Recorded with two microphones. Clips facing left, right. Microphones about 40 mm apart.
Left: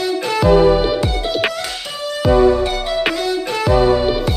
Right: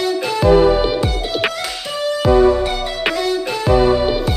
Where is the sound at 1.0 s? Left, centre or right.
Centre.